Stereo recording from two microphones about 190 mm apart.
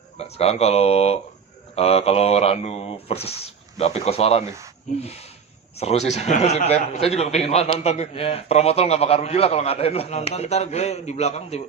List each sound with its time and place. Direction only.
0.2 s a man's voice: 35° left (ahead or behind)